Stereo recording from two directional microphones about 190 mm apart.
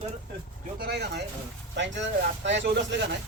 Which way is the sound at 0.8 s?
60° right (ahead or behind).